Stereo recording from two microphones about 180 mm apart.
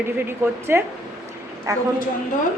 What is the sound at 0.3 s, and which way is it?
A woman's voice, 10° right (ahead or behind).